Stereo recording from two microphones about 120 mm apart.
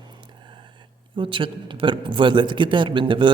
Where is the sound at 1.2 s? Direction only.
45° right (ahead or behind).